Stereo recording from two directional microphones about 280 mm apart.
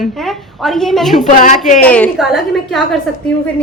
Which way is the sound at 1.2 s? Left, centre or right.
Left.